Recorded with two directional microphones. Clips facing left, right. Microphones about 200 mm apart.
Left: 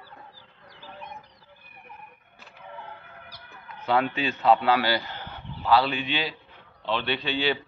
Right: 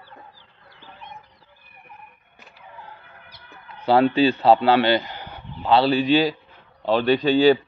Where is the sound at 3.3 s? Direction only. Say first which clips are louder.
Right 4 dB; 35° right (ahead or behind); by 5.7 s 15° right (ahead or behind).